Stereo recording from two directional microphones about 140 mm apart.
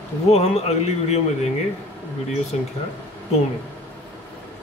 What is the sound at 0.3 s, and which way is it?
Speech, 50° left (ahead or behind).